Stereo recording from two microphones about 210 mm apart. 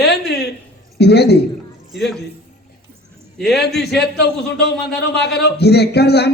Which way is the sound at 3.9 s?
50° left (ahead or behind).